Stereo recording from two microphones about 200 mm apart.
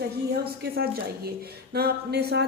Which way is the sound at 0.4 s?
50° right (ahead or behind).